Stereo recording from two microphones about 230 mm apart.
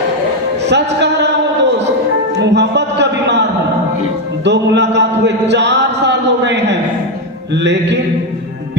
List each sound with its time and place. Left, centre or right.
0.7 s music: right
2.4 s a sound: right
4.4 s music: right